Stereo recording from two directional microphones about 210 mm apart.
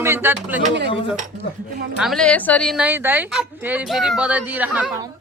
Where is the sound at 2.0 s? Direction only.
Centre (ahead or behind).